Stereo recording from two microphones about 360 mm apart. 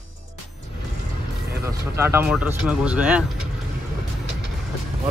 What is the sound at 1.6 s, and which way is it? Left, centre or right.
Speech, centre.